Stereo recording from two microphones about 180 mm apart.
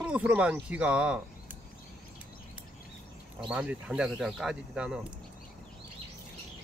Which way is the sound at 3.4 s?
5° right (ahead or behind).